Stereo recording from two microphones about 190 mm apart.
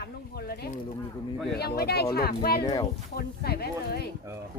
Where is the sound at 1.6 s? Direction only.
55° left (ahead or behind).